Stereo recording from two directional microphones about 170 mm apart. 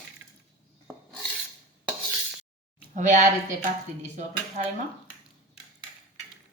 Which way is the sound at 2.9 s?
50° right (ahead or behind).